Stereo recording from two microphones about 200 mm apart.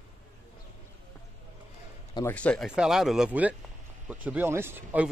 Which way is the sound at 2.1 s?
10° left (ahead or behind).